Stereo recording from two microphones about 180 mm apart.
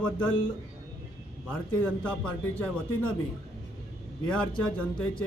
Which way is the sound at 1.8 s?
5° left (ahead or behind).